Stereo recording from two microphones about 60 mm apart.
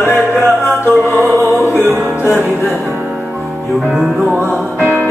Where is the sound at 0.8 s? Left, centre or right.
Left.